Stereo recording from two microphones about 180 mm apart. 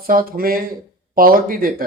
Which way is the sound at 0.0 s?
55° right (ahead or behind).